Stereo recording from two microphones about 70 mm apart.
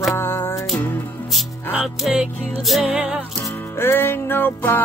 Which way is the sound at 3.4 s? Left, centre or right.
Left.